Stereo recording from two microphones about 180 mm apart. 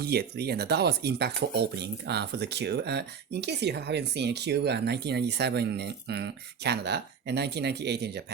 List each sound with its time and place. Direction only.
0.0 s speech: 65° right (ahead or behind)